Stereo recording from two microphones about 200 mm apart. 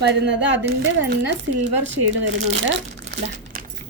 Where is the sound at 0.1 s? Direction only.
60° right (ahead or behind).